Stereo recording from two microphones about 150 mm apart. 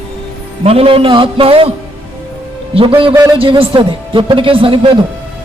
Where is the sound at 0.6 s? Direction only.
40° right (ahead or behind).